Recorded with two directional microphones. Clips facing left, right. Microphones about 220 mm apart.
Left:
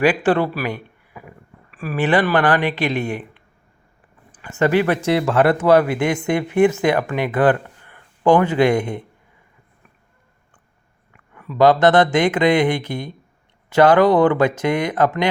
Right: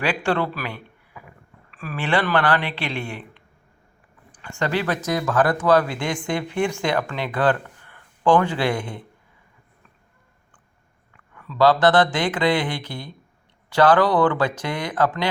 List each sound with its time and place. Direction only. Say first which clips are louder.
0.0 s a man's voice: left 6 dB; 15° left (ahead or behind)
4.5 s speech: left 7 dB; 15° left (ahead or behind)
4.9 s speech: left 4 dB; 30° left (ahead or behind)
6.2 s speech: left 5 dB; 10° left (ahead or behind)
6.6 s speech: left 8 dB; 20° left (ahead or behind)
7.3 s a sound: left 5 dB; 20° left (ahead or behind)
8.4 s speech: left 7 dB; 20° left (ahead or behind)
11.3 s speech: left 3 dB; 15° left (ahead or behind)